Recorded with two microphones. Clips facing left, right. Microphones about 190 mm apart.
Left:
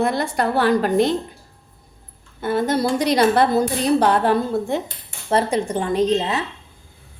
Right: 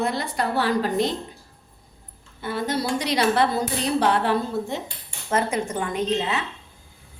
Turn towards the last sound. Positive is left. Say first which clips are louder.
# left 5 dB
turn(degrees=35)  # may be behind; listen again after turning